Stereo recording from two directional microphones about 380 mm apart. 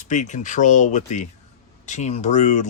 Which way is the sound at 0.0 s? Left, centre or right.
Centre.